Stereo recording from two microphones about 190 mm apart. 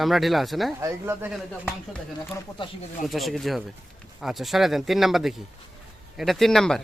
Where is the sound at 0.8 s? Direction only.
15° right (ahead or behind).